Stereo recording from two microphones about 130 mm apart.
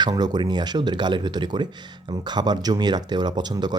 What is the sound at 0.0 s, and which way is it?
Speech, 30° right (ahead or behind).